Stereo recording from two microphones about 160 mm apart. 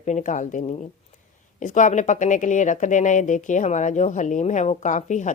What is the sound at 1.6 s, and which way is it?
Speech, 50° left (ahead or behind).